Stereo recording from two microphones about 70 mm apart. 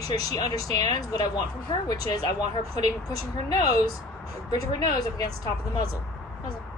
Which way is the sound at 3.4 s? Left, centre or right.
Left.